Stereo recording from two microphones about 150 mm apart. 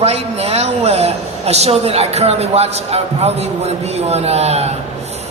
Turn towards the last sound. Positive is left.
turn(degrees=-45)  # may be behind; listen again after turning